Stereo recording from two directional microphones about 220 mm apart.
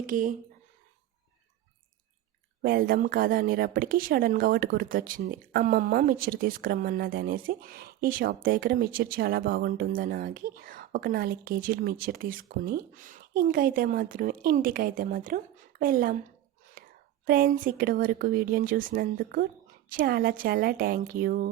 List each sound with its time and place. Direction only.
0.1 s a woman's voice: 35° right (ahead or behind)
2.6 s a woman's voice: 40° right (ahead or behind)
16.8 s whispering: 40° right (ahead or behind)
17.2 s a woman's voice: 40° right (ahead or behind)